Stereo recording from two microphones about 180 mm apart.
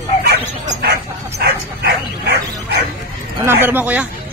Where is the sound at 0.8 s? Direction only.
65° right (ahead or behind).